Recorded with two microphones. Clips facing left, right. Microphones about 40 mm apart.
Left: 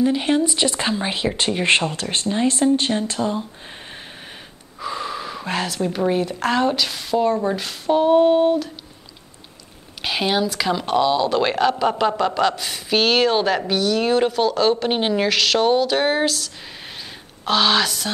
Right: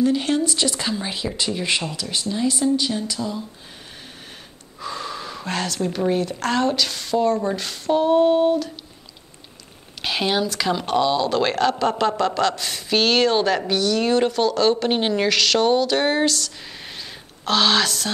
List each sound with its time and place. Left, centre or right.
0.0 s speech: centre
4.7 s speech: centre
10.0 s speech: centre